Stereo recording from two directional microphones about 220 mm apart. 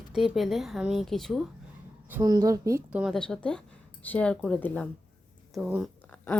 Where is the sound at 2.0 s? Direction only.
10° right (ahead or behind); by 4.9 s 5° left (ahead or behind).